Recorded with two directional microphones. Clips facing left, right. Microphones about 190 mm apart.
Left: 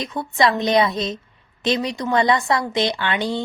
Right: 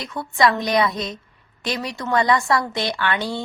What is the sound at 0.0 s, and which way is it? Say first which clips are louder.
A woman's voice: even; 20° left (ahead or behind).